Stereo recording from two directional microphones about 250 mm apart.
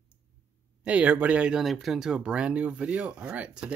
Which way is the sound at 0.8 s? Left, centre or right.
Centre.